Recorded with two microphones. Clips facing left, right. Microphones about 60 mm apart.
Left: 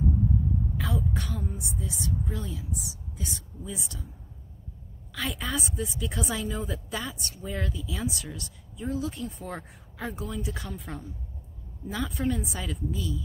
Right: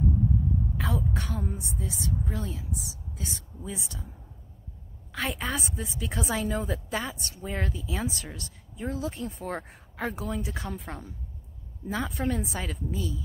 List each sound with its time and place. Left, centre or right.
0.7 s a woman's voice: right
5.1 s a woman's voice: right